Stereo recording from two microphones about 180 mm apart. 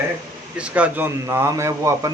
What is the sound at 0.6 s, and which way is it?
Speech, 10° right (ahead or behind).